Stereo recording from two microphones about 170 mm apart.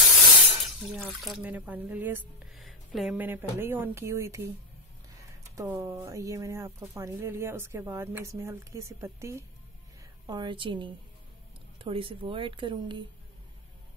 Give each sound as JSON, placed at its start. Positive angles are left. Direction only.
{"t": 0.8, "sound": "speech", "side_deg": 0}
{"t": 2.5, "sound": "speech", "side_deg": 0}
{"t": 5.6, "sound": "a woman's voice", "side_deg": -15}